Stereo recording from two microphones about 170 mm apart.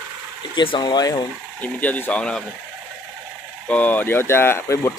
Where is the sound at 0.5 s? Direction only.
30° left (ahead or behind).